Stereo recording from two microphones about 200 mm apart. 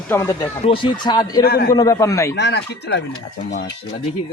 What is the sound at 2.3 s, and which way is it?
Speech, 60° left (ahead or behind).